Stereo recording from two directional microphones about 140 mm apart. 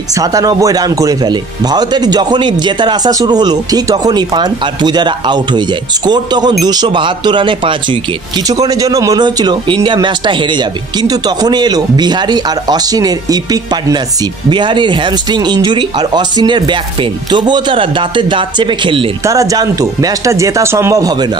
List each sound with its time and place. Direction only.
0.1 s speech: 25° right (ahead or behind)
8.5 s speech: 25° right (ahead or behind)
19.2 s speech: 25° right (ahead or behind)